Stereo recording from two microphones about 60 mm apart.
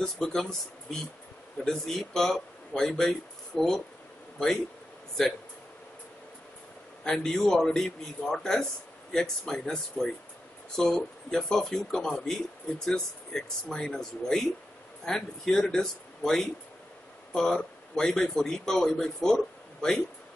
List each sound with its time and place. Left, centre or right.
0.0 s speech: centre
1.6 s speech: centre
5.2 s speech: centre
7.1 s speech: centre